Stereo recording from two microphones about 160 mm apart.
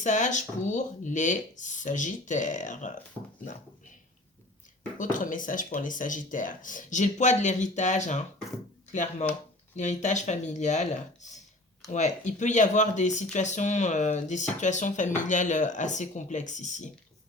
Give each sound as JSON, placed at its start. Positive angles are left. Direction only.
{"t": 0.0, "sound": "speech", "side_deg": 50}
{"t": 4.9, "sound": "speech", "side_deg": 55}